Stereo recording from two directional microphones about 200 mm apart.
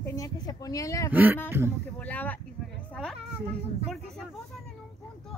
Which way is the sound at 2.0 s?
10° left (ahead or behind).